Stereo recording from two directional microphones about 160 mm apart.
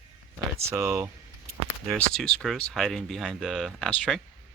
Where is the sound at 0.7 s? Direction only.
15° right (ahead or behind).